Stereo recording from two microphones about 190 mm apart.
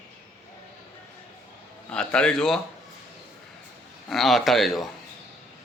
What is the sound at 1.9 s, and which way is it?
Speech, 5° left (ahead or behind).